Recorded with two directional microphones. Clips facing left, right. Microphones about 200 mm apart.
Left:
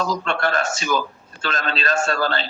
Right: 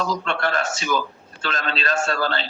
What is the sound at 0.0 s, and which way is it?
A man's voice, 45° left (ahead or behind).